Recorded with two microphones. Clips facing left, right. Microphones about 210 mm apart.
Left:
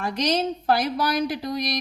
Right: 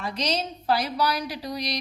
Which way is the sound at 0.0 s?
50° left (ahead or behind).